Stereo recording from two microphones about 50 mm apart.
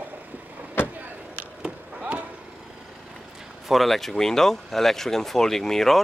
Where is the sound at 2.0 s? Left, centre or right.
Right.